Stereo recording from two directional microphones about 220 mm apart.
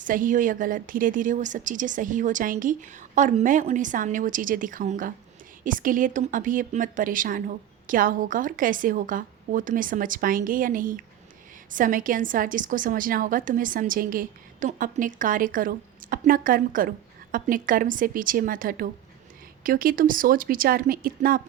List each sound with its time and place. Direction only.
0.0 s a woman's voice: 35° right (ahead or behind)